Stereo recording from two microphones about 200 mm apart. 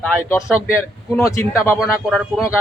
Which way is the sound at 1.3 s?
15° left (ahead or behind).